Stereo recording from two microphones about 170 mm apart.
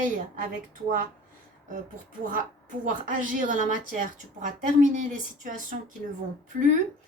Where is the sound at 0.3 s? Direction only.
55° right (ahead or behind).